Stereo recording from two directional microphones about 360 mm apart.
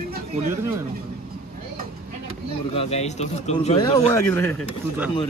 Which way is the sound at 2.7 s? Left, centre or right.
Centre.